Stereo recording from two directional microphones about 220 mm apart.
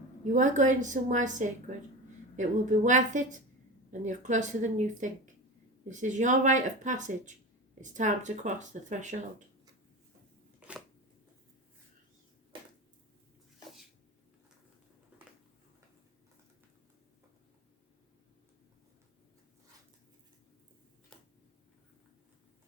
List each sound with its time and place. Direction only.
0.3 s speech: 35° right (ahead or behind)
10.6 s shuffling cards: 5° right (ahead or behind)